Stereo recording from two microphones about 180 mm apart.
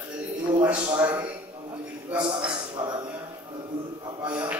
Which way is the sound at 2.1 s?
25° right (ahead or behind).